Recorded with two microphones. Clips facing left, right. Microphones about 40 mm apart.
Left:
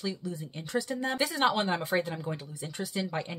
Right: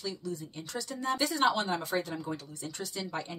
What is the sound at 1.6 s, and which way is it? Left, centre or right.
Speech, left.